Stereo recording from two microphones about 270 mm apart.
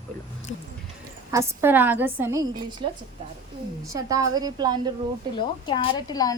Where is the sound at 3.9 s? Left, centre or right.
Centre.